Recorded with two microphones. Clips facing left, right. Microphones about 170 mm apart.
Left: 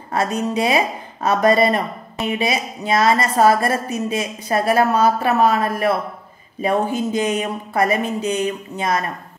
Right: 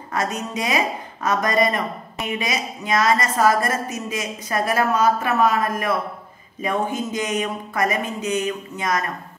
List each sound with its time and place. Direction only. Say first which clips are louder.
0.1 s a woman's voice: left 5 dB; 30° left (ahead or behind)